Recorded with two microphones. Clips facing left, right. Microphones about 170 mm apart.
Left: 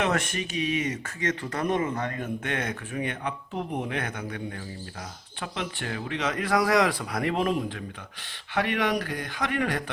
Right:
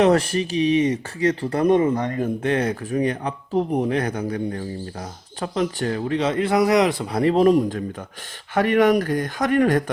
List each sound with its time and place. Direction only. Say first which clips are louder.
0.0 s a man's voice: right 10 dB; 35° right (ahead or behind)